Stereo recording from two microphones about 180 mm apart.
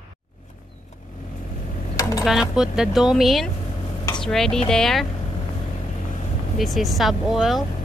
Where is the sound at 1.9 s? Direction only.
20° left (ahead or behind).